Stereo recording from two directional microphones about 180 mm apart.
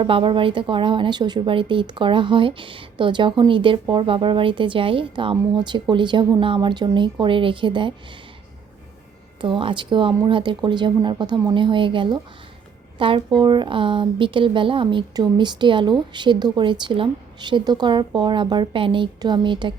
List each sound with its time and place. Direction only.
0.0 s speech: 30° right (ahead or behind)
9.4 s speech: 30° right (ahead or behind)